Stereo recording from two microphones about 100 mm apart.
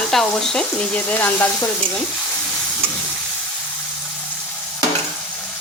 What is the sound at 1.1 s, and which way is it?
Sizzle, 20° left (ahead or behind).